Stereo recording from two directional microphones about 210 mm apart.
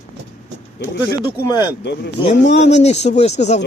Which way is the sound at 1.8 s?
55° left (ahead or behind).